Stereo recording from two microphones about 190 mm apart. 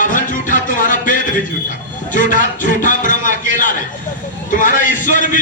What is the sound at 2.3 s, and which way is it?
A man's voice, 40° left (ahead or behind).